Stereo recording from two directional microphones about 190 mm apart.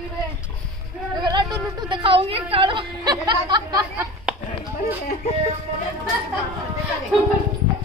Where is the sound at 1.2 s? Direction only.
20° right (ahead or behind).